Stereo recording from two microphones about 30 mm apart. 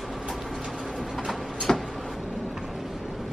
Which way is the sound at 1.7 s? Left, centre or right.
Left.